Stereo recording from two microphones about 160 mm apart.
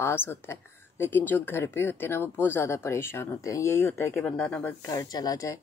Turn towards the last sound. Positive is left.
turn(degrees=20)  # may be behind; listen again after turning